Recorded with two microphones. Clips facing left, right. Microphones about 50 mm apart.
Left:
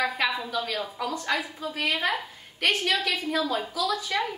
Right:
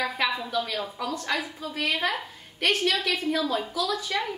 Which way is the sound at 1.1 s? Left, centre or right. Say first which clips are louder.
Left 1 dB; centre.